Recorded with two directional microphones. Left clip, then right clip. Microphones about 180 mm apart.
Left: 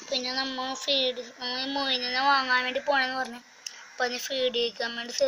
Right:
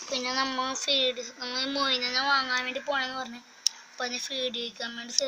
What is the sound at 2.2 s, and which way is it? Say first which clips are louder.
Speech: left 6 dB; centre (ahead or behind).